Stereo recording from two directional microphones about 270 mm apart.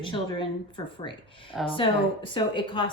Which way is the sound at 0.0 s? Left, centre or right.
Centre.